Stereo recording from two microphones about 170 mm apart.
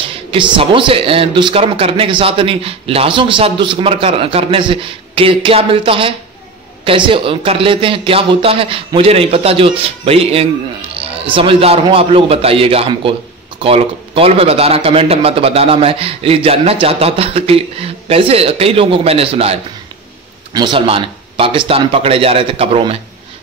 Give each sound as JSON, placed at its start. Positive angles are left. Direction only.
{"t": 0.0, "sound": "speech", "side_deg": -30}